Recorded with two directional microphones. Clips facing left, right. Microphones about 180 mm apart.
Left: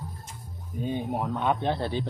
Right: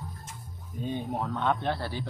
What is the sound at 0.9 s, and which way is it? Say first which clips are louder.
Speech: left 2 dB; 15° left (ahead or behind).